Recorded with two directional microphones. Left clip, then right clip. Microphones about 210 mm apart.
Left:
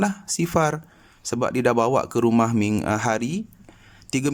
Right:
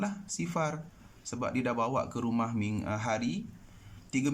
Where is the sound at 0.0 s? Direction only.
55° left (ahead or behind).